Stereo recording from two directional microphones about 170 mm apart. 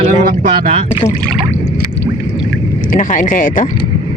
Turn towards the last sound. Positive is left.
turn(degrees=50)  # may be behind; listen again after turning